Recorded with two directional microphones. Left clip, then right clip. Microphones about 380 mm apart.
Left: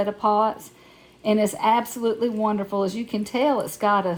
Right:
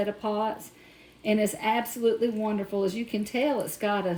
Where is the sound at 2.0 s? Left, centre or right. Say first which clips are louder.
Left 3 dB; left.